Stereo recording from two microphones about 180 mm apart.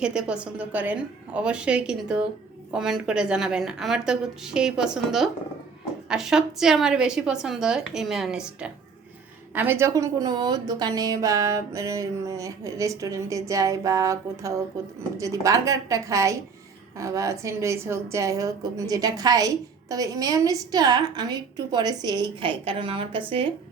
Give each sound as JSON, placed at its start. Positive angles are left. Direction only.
{"t": 0.0, "sound": "a woman's voice", "side_deg": -5}